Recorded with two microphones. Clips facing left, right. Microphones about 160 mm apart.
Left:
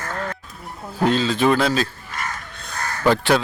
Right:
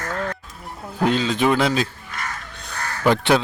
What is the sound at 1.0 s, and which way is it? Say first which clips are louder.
Speech: left 1 dB; 15° right (ahead or behind).